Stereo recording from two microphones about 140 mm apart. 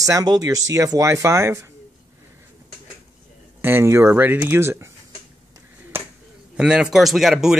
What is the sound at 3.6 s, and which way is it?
Speech, 15° right (ahead or behind).